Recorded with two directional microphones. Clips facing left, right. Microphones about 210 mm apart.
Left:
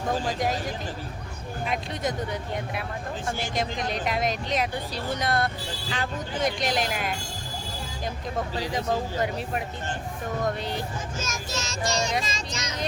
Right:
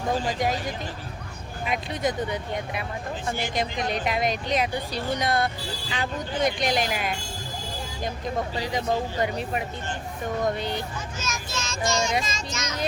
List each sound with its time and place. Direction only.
0.3 s speech: centre (ahead or behind)
1.6 s speech: centre (ahead or behind)
8.7 s speech: centre (ahead or behind)
11.2 s a child's voice: 45° left (ahead or behind)